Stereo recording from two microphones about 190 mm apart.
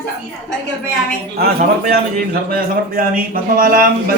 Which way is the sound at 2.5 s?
50° right (ahead or behind).